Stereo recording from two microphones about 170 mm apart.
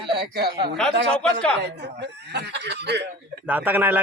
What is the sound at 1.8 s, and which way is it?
Speech, 75° right (ahead or behind).